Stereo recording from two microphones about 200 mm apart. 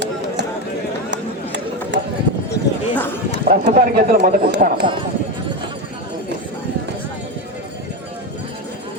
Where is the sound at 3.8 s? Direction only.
45° right (ahead or behind).